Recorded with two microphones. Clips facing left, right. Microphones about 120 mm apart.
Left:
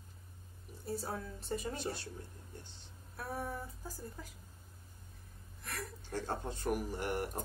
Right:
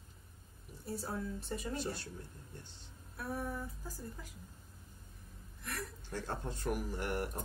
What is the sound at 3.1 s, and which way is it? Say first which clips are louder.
Music: right 1 dB; 40° left (ahead or behind).